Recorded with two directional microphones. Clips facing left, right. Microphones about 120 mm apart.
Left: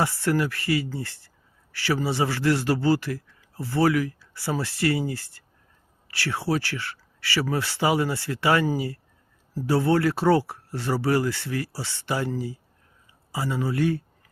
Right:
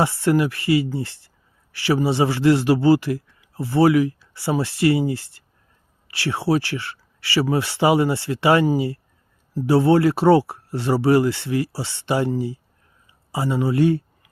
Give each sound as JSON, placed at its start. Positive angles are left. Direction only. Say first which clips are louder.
{"t": 0.0, "sound": "a man's voice", "louder": "right 5 dB", "side_deg": -20}